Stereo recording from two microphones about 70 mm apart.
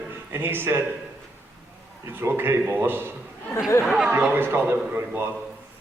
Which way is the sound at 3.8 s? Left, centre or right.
Centre.